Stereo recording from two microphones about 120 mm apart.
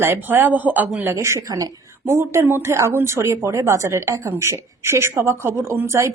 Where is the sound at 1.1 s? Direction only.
25° right (ahead or behind).